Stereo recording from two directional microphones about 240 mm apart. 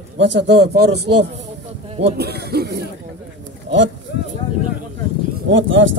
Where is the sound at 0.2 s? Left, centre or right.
Right.